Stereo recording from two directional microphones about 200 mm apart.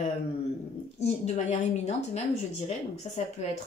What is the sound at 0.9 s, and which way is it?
Speech, 35° left (ahead or behind).